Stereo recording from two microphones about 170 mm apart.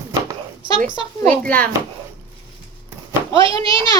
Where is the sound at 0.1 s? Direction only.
20° right (ahead or behind).